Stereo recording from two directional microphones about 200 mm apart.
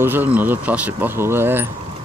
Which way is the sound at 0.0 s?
10° right (ahead or behind).